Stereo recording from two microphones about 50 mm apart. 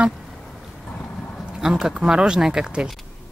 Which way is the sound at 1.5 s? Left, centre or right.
Centre.